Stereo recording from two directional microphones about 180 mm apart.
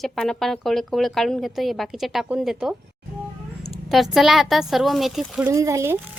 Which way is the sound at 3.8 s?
Centre (ahead or behind).